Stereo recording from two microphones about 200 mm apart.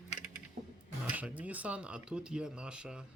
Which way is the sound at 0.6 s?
40° right (ahead or behind).